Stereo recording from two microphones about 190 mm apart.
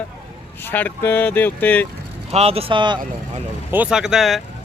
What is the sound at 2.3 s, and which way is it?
Speech, 30° right (ahead or behind).